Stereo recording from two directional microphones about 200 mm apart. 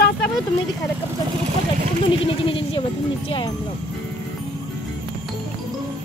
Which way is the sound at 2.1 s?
25° left (ahead or behind).